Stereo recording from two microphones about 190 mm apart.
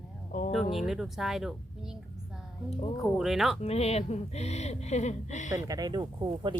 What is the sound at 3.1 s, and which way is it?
Speech, centre (ahead or behind).